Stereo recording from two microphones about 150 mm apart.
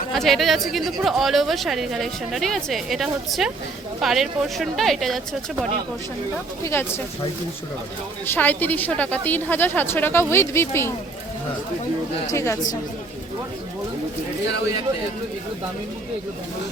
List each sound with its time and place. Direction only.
0.1 s a woman's voice: centre (ahead or behind)
6.7 s a woman's voice: 15° left (ahead or behind)
8.3 s a woman's voice: 10° left (ahead or behind)
12.3 s a woman's voice: 20° left (ahead or behind)